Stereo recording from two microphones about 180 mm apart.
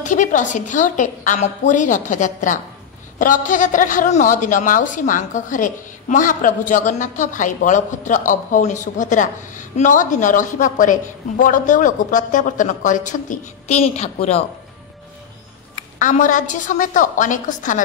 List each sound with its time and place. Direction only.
0.0 s a woman's voice: 45° left (ahead or behind)
16.0 s a woman's voice: 45° left (ahead or behind)